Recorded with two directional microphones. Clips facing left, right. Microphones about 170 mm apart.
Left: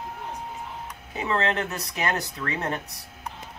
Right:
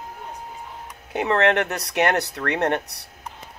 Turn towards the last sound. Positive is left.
turn(degrees=-75)  # may be behind; listen again after turning